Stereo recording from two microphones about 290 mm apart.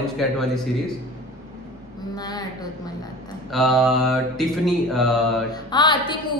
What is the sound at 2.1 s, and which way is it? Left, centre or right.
Speech, centre.